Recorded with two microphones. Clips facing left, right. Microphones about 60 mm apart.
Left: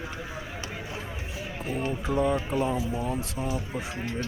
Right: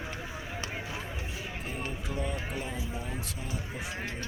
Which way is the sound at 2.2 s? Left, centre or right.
Left.